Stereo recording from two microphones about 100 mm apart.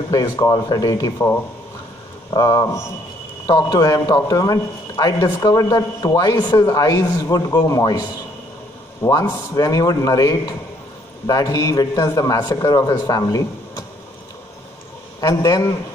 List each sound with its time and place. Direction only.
0.1 s a man's voice: 40° left (ahead or behind)
1.1 s speech: 25° left (ahead or behind)
2.3 s a man's voice: 40° left (ahead or behind)
9.6 s a man's voice: 35° left (ahead or behind)
15.1 s a man's voice: 35° left (ahead or behind)